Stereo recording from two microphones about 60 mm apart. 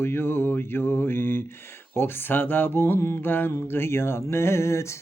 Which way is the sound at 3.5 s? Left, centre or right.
Left.